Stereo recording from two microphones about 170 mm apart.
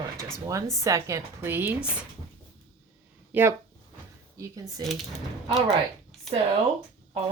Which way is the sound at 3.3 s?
10° right (ahead or behind).